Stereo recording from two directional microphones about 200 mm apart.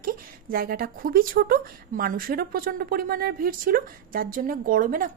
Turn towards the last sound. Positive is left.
turn(degrees=-45)  # may be behind; listen again after turning